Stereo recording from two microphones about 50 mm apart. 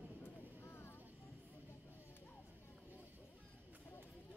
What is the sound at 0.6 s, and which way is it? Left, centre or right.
Vehicle, left.